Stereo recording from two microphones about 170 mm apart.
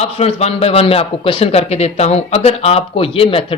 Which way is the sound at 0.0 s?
40° left (ahead or behind).